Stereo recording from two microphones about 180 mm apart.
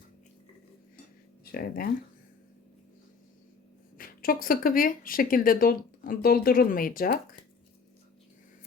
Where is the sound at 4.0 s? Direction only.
55° left (ahead or behind).